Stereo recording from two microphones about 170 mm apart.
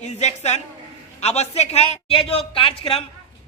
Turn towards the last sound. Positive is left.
turn(degrees=35)  # may be behind; listen again after turning